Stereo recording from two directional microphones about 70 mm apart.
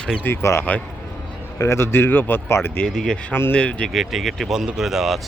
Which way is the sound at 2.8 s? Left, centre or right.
Centre.